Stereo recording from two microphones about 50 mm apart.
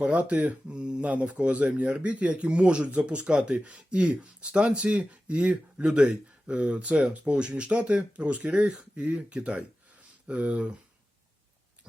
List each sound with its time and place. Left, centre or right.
0.0 s speech: right